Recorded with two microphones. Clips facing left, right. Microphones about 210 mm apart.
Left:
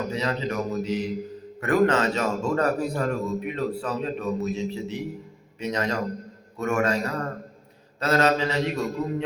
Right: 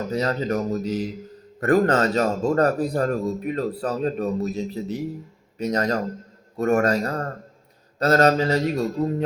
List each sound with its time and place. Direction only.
0.1 s a man's voice: 40° right (ahead or behind)